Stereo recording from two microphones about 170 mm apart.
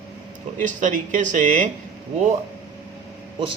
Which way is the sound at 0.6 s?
50° right (ahead or behind).